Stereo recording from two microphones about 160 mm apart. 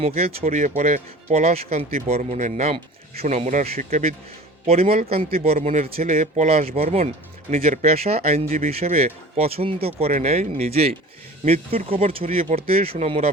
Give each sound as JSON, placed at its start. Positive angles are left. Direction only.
{"t": 0.0, "sound": "speech", "side_deg": -40}
{"t": 5.5, "sound": "speech", "side_deg": -50}